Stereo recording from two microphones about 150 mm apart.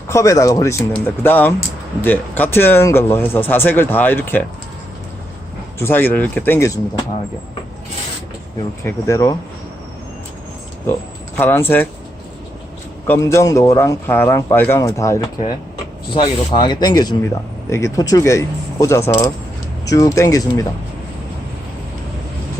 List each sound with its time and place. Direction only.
0.1 s a man's voice: 20° left (ahead or behind)
5.8 s speech: 15° left (ahead or behind)
8.8 s a man's voice: 20° left (ahead or behind)
11.3 s speech: 15° left (ahead or behind)
13.1 s a man's voice: 20° left (ahead or behind)
16.1 s a man's voice: 35° left (ahead or behind)